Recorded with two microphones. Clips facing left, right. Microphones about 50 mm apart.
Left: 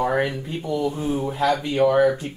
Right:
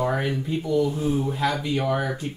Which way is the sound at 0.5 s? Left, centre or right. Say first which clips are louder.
Right 2 dB; left.